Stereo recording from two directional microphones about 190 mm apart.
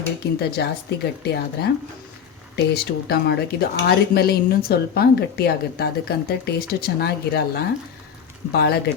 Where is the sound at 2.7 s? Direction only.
55° left (ahead or behind).